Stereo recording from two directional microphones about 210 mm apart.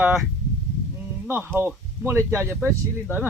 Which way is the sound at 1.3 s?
10° right (ahead or behind).